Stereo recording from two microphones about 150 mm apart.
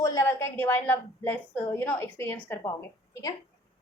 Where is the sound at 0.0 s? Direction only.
20° left (ahead or behind).